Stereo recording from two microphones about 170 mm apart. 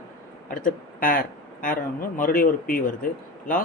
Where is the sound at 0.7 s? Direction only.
55° left (ahead or behind).